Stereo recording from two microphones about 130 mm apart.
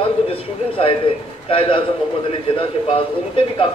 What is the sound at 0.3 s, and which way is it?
A man's voice, 45° left (ahead or behind).